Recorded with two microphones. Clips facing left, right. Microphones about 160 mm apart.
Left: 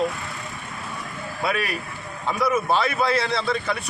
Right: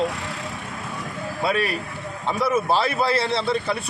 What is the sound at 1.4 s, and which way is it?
A man's voice, 30° right (ahead or behind).